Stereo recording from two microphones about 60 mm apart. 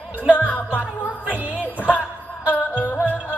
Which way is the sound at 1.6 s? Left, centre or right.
Left.